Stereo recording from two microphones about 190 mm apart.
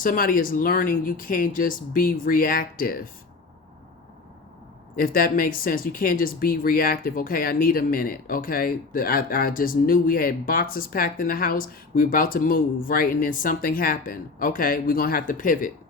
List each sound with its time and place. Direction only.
0.0 s speech: 45° left (ahead or behind)
4.9 s speech: 50° left (ahead or behind)